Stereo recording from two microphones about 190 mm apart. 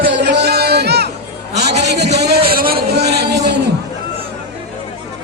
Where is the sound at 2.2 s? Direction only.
60° right (ahead or behind).